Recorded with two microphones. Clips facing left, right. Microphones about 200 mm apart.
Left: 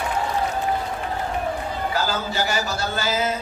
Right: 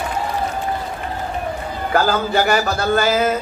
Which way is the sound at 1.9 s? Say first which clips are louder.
Right 10 dB; 55° right (ahead or behind).